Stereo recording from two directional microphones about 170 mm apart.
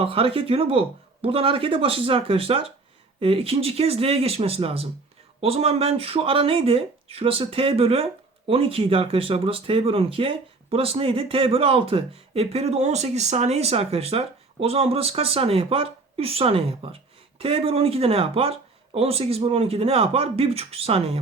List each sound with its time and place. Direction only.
0.0 s speech: 35° right (ahead or behind)